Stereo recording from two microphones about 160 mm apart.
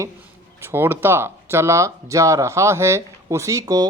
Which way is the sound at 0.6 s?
15° right (ahead or behind).